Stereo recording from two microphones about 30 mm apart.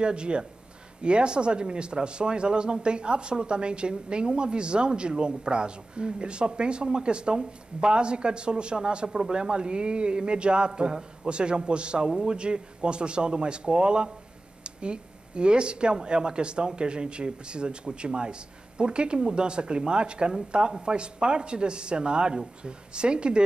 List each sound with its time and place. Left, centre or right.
0.0 s speech: right